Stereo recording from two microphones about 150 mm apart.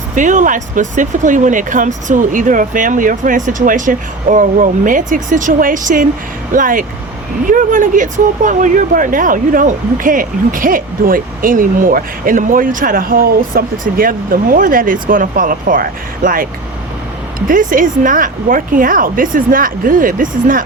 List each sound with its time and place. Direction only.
0.2 s speech: 55° right (ahead or behind)
17.5 s speech: 65° right (ahead or behind)